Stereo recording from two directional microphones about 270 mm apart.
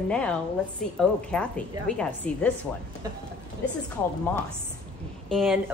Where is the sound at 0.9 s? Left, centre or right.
Centre.